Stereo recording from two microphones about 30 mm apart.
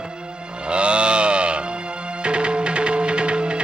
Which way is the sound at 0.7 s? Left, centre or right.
Right.